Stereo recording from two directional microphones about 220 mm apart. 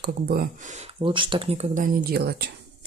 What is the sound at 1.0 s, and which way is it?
Speech, 25° right (ahead or behind).